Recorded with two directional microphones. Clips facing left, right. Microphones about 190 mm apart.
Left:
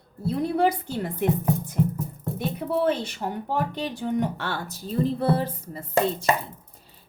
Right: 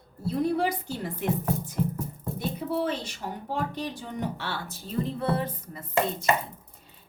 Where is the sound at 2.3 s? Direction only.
60° left (ahead or behind); by 6.3 s 30° left (ahead or behind).